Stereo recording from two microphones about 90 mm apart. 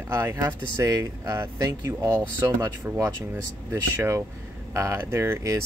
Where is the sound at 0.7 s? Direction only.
40° right (ahead or behind).